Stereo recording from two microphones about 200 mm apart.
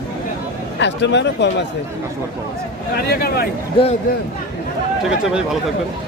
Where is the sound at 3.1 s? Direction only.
50° left (ahead or behind).